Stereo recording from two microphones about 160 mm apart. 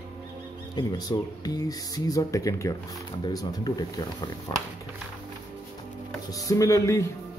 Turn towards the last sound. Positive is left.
turn(degrees=20)  # may be behind; listen again after turning